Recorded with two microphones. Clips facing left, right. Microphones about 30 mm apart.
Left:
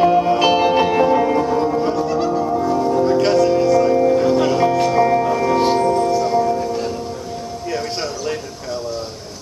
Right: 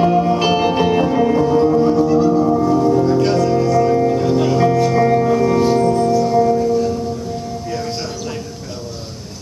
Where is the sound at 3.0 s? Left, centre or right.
Left.